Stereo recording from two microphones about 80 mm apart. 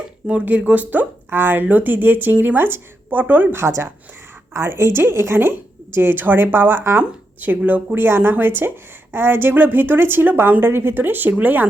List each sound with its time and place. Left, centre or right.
0.3 s speech: centre